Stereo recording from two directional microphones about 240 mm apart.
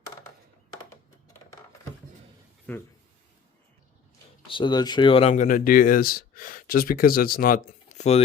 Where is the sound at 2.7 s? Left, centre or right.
Centre.